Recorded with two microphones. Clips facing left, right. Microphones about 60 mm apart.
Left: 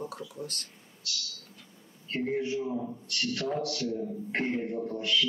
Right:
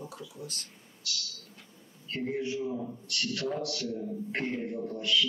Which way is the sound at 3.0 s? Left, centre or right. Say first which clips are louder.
Even; left.